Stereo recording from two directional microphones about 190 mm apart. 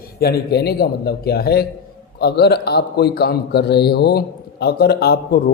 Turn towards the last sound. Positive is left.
turn(degrees=55)  # may be behind; listen again after turning